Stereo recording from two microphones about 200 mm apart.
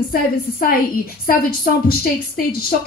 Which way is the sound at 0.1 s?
45° left (ahead or behind).